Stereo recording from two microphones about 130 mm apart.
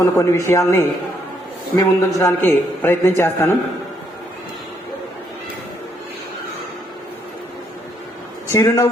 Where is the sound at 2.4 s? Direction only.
15° left (ahead or behind).